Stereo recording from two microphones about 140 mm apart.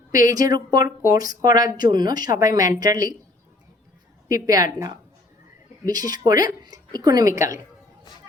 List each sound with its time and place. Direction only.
0.3 s speech: 25° right (ahead or behind)
4.3 s speech: 25° right (ahead or behind)